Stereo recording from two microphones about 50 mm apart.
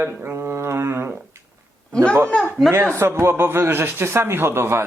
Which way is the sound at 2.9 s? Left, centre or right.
Right.